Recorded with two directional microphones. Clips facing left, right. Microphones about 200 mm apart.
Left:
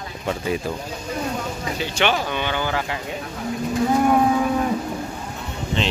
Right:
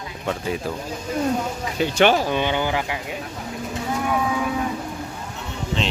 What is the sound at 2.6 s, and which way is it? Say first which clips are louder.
Speech: right 1 dB; 15° right (ahead or behind).